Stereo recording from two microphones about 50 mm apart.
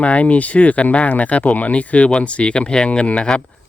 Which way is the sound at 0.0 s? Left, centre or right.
Left.